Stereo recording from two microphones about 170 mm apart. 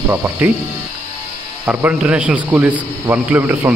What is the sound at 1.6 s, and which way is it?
A man's voice, 5° right (ahead or behind).